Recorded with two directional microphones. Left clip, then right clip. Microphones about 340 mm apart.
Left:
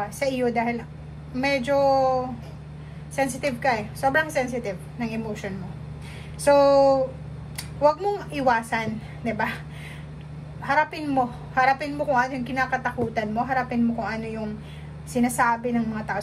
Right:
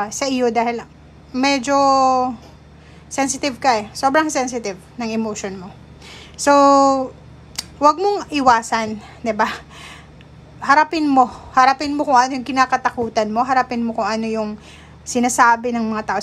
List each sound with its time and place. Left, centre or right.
0.2 s a woman's voice: centre
7.5 s a woman's voice: centre
10.7 s a woman's voice: centre